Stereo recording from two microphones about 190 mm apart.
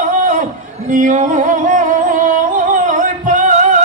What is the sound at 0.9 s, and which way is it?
Music, 45° right (ahead or behind).